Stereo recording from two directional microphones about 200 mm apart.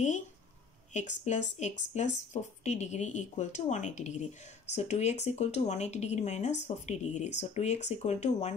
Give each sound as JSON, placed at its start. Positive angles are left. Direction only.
{"t": 0.9, "sound": "speech", "side_deg": 35}